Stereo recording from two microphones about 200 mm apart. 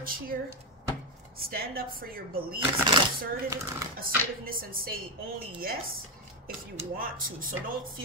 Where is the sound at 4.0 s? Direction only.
45° right (ahead or behind).